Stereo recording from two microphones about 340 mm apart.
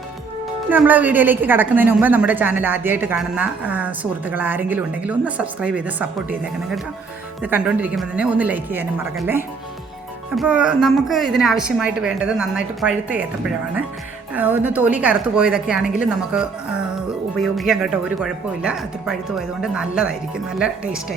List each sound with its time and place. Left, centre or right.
0.7 s a woman's voice: centre